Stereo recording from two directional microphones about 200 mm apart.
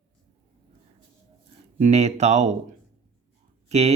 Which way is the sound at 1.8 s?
35° right (ahead or behind).